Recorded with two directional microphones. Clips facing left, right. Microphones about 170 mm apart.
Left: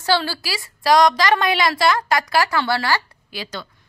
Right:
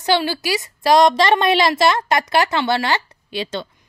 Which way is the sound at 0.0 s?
20° right (ahead or behind).